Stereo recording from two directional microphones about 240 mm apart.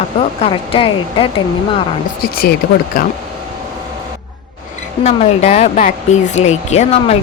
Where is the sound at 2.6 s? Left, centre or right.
Left.